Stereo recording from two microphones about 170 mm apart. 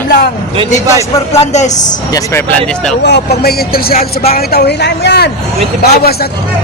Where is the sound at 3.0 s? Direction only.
80° left; by 4.0 s 65° left (ahead or behind).